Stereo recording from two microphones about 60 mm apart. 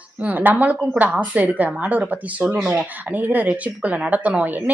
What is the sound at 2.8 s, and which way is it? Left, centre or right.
A woman's voice, right.